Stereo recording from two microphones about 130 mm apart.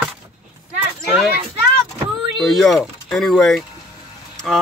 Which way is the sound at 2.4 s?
Centre (ahead or behind).